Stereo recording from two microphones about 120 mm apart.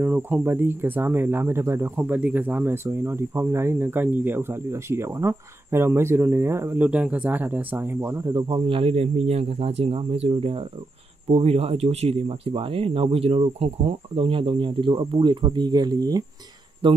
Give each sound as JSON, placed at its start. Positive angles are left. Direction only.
{"t": 0.0, "sound": "speech", "side_deg": -15}
{"t": 8.6, "sound": "speech", "side_deg": -50}
{"t": 16.8, "sound": "speech", "side_deg": -45}